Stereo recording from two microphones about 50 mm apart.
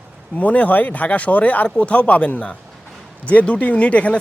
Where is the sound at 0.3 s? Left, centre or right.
Left.